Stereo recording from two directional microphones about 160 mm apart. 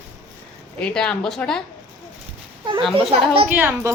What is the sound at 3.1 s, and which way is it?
Speech, 35° right (ahead or behind).